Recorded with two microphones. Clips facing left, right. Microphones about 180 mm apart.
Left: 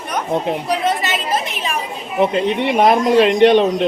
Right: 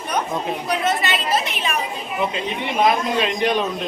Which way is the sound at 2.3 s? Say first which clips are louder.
Left 8 dB; 65° left (ahead or behind).